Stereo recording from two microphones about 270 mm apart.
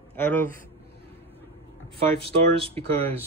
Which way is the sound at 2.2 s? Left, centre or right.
Right.